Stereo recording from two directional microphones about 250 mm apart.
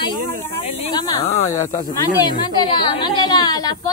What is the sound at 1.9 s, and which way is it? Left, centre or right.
A woman's voice, centre.